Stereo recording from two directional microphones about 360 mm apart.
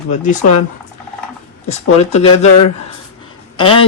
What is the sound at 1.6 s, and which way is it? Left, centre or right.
Speech, centre.